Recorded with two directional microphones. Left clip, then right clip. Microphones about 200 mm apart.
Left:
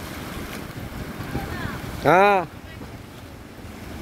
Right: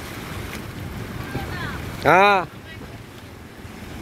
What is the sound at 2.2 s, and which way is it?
Speech, 20° left (ahead or behind).